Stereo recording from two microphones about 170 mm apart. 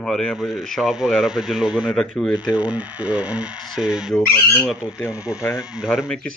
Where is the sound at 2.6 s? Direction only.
5° right (ahead or behind).